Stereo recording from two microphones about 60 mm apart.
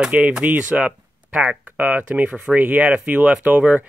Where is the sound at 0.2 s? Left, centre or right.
Right.